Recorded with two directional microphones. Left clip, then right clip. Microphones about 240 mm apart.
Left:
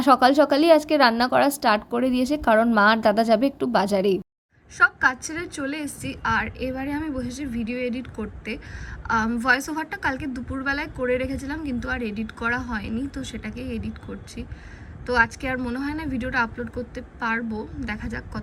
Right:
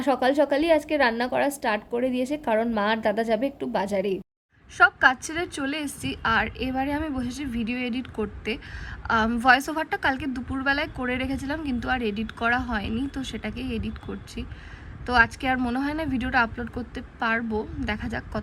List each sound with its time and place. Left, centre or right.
0.0 s a woman's voice: centre
4.8 s a woman's voice: centre